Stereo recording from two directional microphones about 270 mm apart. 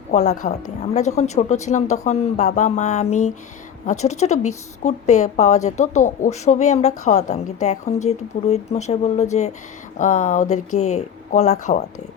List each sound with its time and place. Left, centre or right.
0.1 s a woman's voice: left